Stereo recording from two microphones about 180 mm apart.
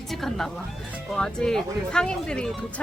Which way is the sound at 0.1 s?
Centre (ahead or behind).